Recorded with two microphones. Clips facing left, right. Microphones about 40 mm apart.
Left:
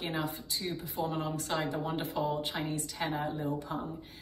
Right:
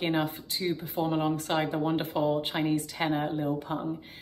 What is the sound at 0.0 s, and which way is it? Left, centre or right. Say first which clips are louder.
Speech: right 7 dB; right.